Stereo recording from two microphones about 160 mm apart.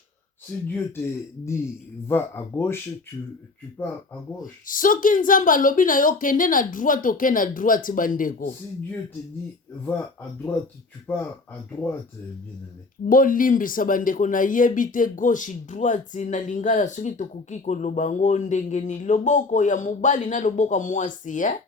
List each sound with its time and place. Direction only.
0.7 s speech: 15° left (ahead or behind)
4.6 s a woman's voice: 55° left (ahead or behind)
11.0 s speech: 10° left (ahead or behind)
13.1 s speech: 60° left (ahead or behind)